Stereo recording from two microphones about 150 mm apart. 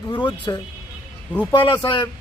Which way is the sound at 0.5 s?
25° left (ahead or behind).